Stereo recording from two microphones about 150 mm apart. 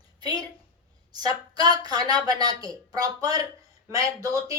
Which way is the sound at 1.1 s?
25° right (ahead or behind).